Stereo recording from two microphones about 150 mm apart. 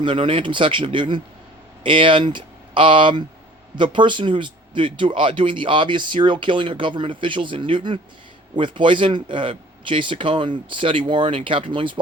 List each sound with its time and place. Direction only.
0.0 s speech: 35° right (ahead or behind)